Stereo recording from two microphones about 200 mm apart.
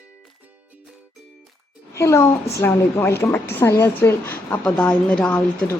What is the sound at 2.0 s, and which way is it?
A woman's voice, 15° left (ahead or behind).